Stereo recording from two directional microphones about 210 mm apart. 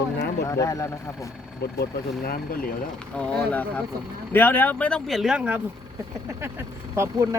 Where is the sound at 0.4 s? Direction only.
15° left (ahead or behind).